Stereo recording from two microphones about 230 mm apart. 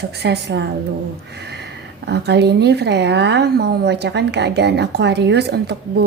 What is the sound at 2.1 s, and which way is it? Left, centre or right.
Speech, right.